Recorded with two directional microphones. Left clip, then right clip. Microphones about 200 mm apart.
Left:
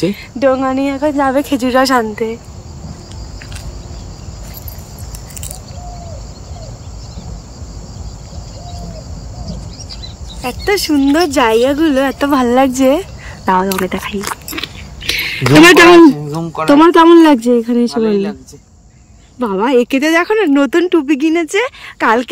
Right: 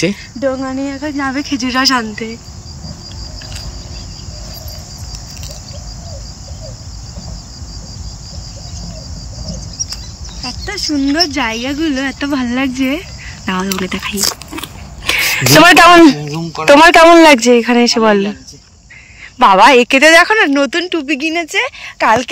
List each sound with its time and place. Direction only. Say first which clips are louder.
0.4 s speech: left 5 dB; 55° left (ahead or behind)
1.1 s speech: left 5 dB; 30° left (ahead or behind)
2.0 s speech: left 4 dB; 10° left (ahead or behind)
10.4 s speech: left 6 dB; 55° left (ahead or behind); by 13.0 s 35° left (ahead or behind)
13.7 s speech: left 2 dB; 20° left (ahead or behind)
14.5 s a sound: left 3 dB; 5° right (ahead or behind)
16.9 s speech: right 2 dB; 15° right (ahead or behind)
19.5 s speech: right 5 dB; 5° right (ahead or behind)
20.6 s speech: left 3 dB; 15° left (ahead or behind)